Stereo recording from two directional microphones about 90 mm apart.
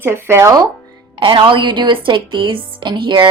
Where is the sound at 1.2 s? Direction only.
65° right (ahead or behind).